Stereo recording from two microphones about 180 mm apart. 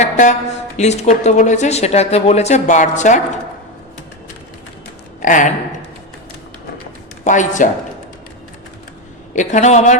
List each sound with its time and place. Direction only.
0.0 s speech: 40° left (ahead or behind)
5.2 s speech: 45° left (ahead or behind)
7.3 s a man's voice: 45° left (ahead or behind)
9.3 s speech: 45° left (ahead or behind)